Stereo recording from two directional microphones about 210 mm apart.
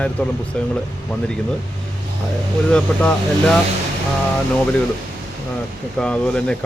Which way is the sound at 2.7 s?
5° left (ahead or behind).